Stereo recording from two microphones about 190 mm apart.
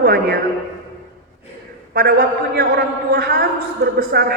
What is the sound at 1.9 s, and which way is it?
A man's voice, 55° right (ahead or behind).